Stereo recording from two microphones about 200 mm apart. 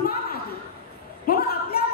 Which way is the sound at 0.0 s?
50° left (ahead or behind).